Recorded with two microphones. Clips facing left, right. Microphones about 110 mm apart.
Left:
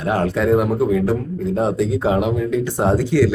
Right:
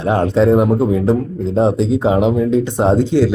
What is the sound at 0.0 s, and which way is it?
A man's voice, 25° right (ahead or behind).